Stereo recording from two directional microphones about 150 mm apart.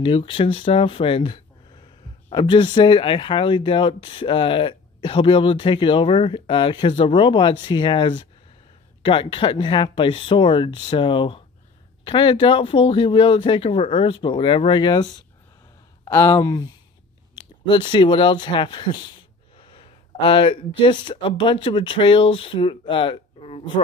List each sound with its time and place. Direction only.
0.0 s speech: 35° left (ahead or behind)
16.3 s speech: 25° left (ahead or behind)